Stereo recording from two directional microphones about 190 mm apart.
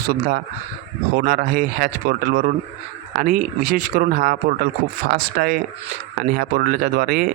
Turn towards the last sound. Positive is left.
turn(degrees=-50)  # may be behind; listen again after turning